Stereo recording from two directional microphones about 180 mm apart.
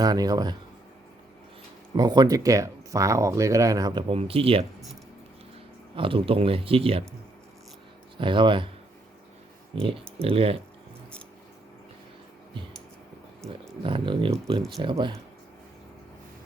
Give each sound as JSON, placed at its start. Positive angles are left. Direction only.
{"t": 0.0, "sound": "speech", "side_deg": -20}
{"t": 2.0, "sound": "speech", "side_deg": -25}
{"t": 6.0, "sound": "speech", "side_deg": -30}
{"t": 8.2, "sound": "speech", "side_deg": -25}
{"t": 10.2, "sound": "speech", "side_deg": -30}
{"t": 13.4, "sound": "speech", "side_deg": 0}
{"t": 13.8, "sound": "speech", "side_deg": -25}